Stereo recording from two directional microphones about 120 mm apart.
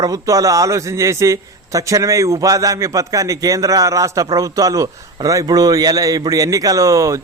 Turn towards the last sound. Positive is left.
turn(degrees=-25)  # may be behind; listen again after turning